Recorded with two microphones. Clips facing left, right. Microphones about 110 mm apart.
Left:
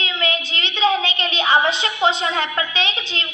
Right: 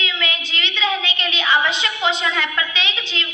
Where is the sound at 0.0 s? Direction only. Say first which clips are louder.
Left 2 dB; 35° left (ahead or behind).